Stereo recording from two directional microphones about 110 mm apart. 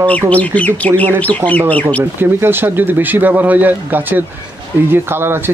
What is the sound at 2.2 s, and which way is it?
Speech, 20° right (ahead or behind).